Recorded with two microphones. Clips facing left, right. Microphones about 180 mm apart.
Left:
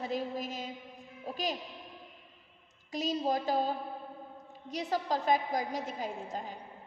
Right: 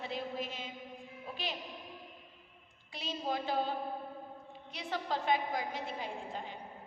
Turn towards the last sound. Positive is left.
turn(degrees=40)  # may be behind; listen again after turning